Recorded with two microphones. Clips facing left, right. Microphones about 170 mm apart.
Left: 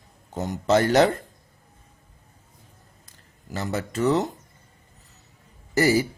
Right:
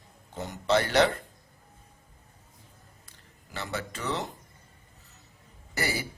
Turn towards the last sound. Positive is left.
turn(degrees=35)  # may be behind; listen again after turning